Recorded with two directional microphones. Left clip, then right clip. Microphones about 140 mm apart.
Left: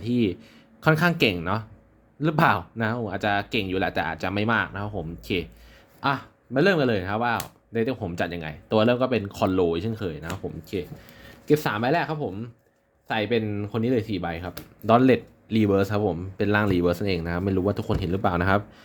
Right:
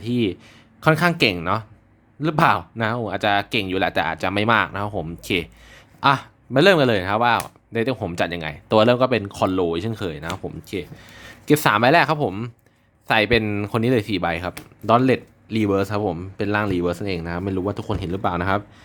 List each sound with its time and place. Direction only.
0.0 s speech: 15° right (ahead or behind)
11.1 s speech: 30° right (ahead or behind); by 12.5 s 55° right (ahead or behind)
13.1 s speech: 35° right (ahead or behind)
14.8 s speech: 15° right (ahead or behind)
16.5 s speech: 10° right (ahead or behind)